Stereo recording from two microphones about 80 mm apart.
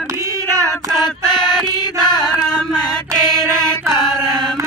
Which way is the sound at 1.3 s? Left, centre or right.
Left.